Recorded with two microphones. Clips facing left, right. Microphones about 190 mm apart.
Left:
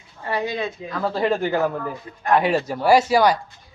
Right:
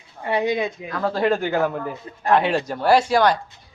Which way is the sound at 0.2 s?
20° right (ahead or behind).